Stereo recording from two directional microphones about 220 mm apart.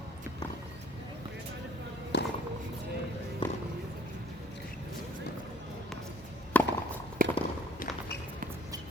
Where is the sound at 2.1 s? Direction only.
50° left (ahead or behind).